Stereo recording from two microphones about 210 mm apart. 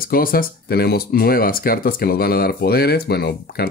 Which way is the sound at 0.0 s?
45° left (ahead or behind).